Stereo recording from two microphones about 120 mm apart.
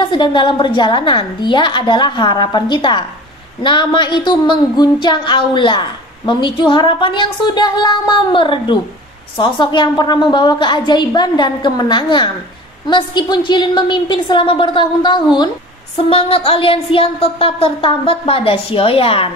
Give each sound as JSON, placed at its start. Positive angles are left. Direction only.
{"t": 0.0, "sound": "a woman's voice", "side_deg": 45}
{"t": 16.0, "sound": "speech", "side_deg": 55}